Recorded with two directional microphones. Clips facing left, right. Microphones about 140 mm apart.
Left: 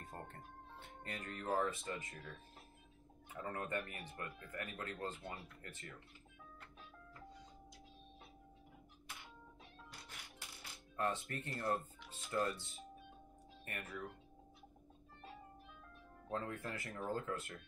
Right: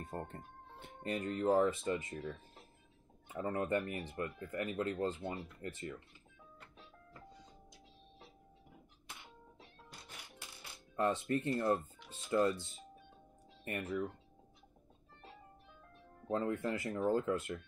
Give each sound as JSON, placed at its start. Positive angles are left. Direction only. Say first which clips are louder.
{"t": 0.1, "sound": "speech", "louder": "right 7 dB", "side_deg": -30}
{"t": 3.3, "sound": "speech", "louder": "right 7 dB", "side_deg": -25}
{"t": 11.0, "sound": "speech", "louder": "right 7 dB", "side_deg": -25}
{"t": 13.7, "sound": "speech", "louder": "right 10 dB", "side_deg": -25}
{"t": 16.3, "sound": "speech", "louder": "right 8 dB", "side_deg": -25}